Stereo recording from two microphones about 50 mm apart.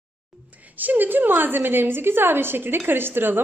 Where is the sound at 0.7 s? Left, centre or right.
Right.